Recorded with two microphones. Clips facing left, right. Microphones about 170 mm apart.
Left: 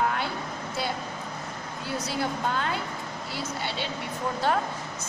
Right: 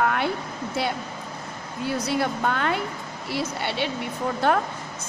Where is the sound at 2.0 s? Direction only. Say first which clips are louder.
Right 4 dB; 65° right (ahead or behind).